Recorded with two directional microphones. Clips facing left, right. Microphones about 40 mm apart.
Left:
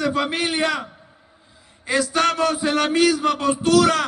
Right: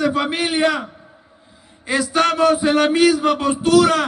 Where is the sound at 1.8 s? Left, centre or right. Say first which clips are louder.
Right 2 dB; right.